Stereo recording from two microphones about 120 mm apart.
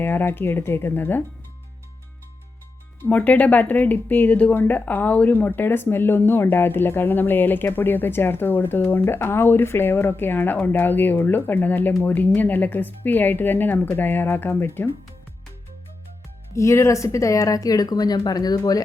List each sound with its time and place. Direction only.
0.0 s speech: 15° left (ahead or behind)
3.0 s speech: 10° left (ahead or behind)
16.6 s speech: 25° left (ahead or behind)